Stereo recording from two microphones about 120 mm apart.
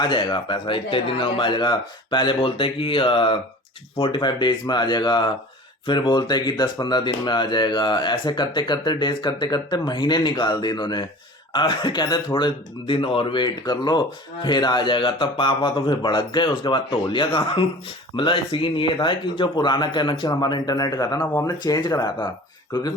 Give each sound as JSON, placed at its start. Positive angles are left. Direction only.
{"t": 0.0, "sound": "speech", "side_deg": 40}